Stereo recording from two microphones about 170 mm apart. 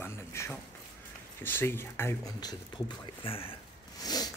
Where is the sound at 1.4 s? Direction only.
10° left (ahead or behind).